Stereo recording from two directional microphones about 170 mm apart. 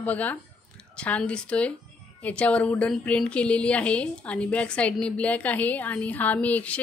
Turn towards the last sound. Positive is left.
turn(degrees=10)  # may be behind; listen again after turning